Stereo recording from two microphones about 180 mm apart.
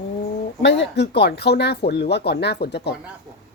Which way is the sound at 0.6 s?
75° left (ahead or behind).